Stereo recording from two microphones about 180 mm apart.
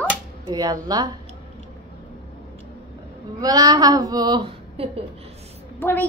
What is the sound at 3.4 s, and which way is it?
Speech, 20° right (ahead or behind).